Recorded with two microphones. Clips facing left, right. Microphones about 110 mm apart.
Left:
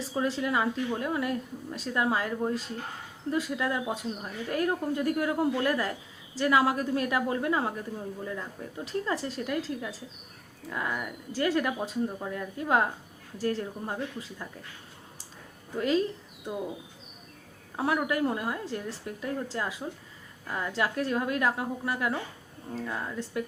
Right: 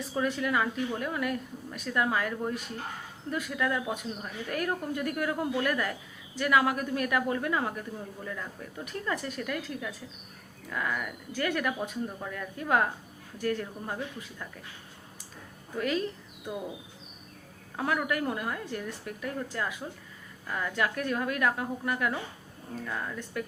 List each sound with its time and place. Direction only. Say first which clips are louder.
0.1 s speech: even; 25° left (ahead or behind)
15.8 s speech: left 4 dB; 25° left (ahead or behind)
17.7 s speech: left 2 dB; 25° left (ahead or behind)